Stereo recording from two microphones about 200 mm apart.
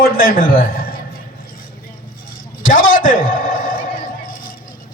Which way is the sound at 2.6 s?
45° left (ahead or behind).